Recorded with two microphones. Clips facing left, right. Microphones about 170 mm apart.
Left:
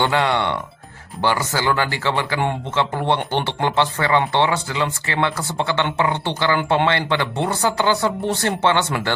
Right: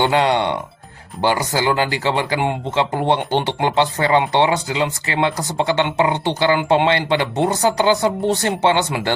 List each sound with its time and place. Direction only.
0.0 s speech: 20° right (ahead or behind)